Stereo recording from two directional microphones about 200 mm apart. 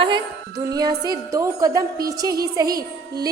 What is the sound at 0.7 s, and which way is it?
A woman's voice, 20° right (ahead or behind).